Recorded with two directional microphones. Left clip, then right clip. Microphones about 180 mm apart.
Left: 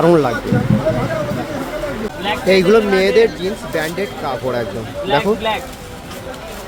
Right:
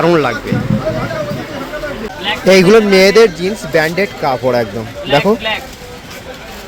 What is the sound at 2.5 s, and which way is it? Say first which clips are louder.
Speech: right 5 dB; 25° right (ahead or behind).